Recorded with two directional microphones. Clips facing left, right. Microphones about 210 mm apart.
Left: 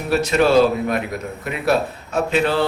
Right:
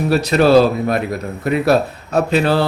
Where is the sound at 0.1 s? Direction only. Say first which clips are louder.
Right 3 dB; 35° right (ahead or behind).